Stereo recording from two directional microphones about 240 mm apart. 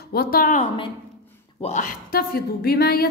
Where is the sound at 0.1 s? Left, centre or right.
Left.